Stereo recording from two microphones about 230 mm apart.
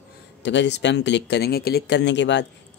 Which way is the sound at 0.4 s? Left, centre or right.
Left.